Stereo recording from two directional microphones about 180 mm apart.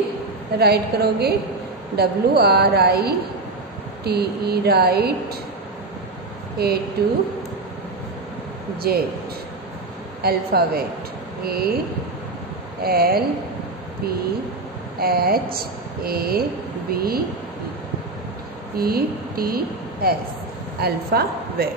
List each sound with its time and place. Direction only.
0.6 s a woman's voice: 65° right (ahead or behind)
6.6 s a woman's voice: 60° right (ahead or behind)
8.8 s a woman's voice: 60° right (ahead or behind)
10.2 s a woman's voice: 60° right (ahead or behind)
12.8 s a woman's voice: 60° right (ahead or behind)
15.0 s a woman's voice: 60° right (ahead or behind)
18.8 s a woman's voice: 55° right (ahead or behind)